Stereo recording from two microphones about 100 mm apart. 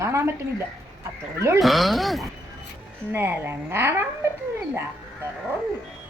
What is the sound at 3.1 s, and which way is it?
A woman's voice, 25° right (ahead or behind).